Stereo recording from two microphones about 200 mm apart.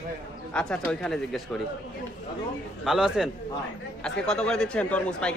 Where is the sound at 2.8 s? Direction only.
Centre (ahead or behind).